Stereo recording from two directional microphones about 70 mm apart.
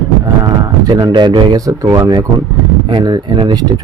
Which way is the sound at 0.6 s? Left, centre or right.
Right.